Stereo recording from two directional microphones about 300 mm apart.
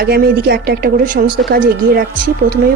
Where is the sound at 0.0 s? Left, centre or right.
Right.